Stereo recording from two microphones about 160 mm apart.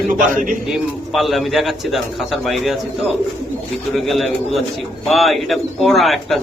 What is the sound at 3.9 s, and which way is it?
Speech, centre (ahead or behind).